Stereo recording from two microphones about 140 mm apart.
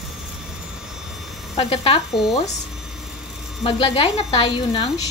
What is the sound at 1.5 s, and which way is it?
Speech, 40° left (ahead or behind).